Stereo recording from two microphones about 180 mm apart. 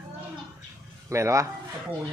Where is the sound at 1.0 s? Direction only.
15° right (ahead or behind).